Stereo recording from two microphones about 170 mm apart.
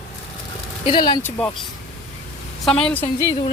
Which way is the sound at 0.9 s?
30° left (ahead or behind).